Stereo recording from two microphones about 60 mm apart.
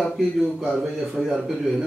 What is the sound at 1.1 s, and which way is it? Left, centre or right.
Speech, centre.